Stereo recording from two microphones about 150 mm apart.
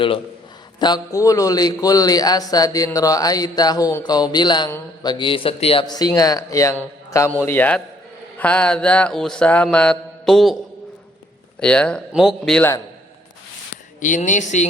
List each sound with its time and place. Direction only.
0.8 s a man's voice: 30° left (ahead or behind)
5.8 s a man's voice: 25° left (ahead or behind)
7.1 s mantra: 15° left (ahead or behind); by 10.6 s centre (ahead or behind)
11.6 s speech: 5° left (ahead or behind)
14.0 s speech: 55° left (ahead or behind)